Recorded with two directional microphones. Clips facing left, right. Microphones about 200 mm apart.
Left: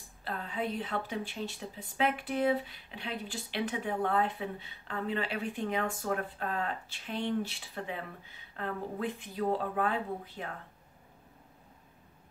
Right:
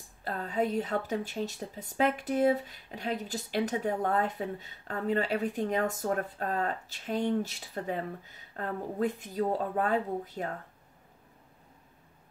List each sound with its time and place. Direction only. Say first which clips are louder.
0.2 s speech: right 5 dB; 45° right (ahead or behind)